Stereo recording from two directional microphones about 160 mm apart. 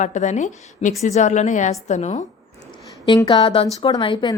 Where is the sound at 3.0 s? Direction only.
25° left (ahead or behind).